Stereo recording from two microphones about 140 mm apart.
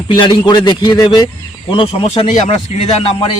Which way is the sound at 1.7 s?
40° left (ahead or behind).